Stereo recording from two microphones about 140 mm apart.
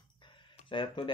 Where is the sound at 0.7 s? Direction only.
35° left (ahead or behind).